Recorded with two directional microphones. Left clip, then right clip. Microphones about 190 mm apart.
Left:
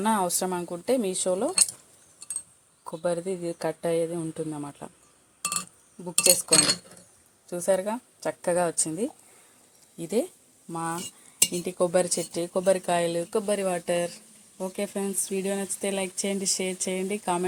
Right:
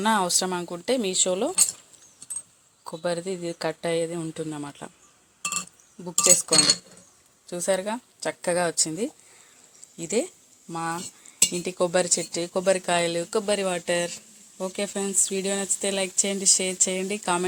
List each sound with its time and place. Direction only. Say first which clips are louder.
0.0 s speech: right 3 dB; 5° left (ahead or behind)
2.8 s speech: even; 5° left (ahead or behind)
6.2 s speech: right 2 dB; 10° left (ahead or behind)